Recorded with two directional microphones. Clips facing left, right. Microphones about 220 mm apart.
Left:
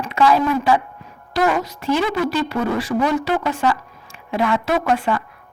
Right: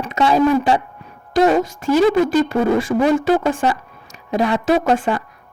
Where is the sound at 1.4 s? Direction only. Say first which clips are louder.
Right 5 dB; 30° right (ahead or behind).